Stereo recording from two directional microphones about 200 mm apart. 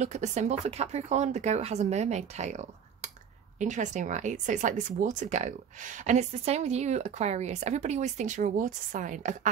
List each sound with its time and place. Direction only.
0.0 s speech: 35° right (ahead or behind)